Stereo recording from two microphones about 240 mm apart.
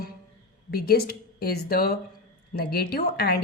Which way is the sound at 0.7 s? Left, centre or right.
Left.